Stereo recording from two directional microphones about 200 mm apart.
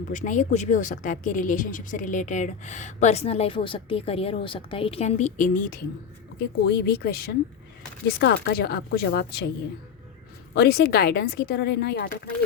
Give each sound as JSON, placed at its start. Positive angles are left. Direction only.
{"t": 0.1, "sound": "speech", "side_deg": 40}
{"t": 8.4, "sound": "speech", "side_deg": 50}
{"t": 10.5, "sound": "speech", "side_deg": 55}